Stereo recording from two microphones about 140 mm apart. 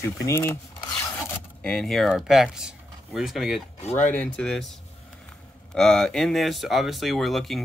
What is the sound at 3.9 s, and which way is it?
Speech, 10° left (ahead or behind).